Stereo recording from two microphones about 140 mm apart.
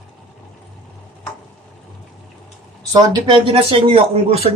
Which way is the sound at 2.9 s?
40° right (ahead or behind).